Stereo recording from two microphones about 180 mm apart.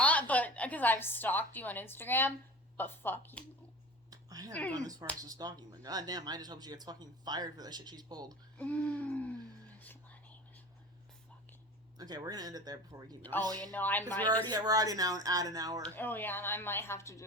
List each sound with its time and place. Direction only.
0.0 s a woman's voice: 10° left (ahead or behind)
4.1 s a sound: 20° right (ahead or behind)
5.2 s speech: 20° right (ahead or behind)
8.5 s a woman's voice: 10° left (ahead or behind)
9.8 s whispering: 10° left (ahead or behind)
11.9 s speech: 20° right (ahead or behind)
13.7 s a woman's voice: 10° left (ahead or behind)
14.4 s speech: 20° right (ahead or behind)
15.8 s a woman's voice: 10° left (ahead or behind)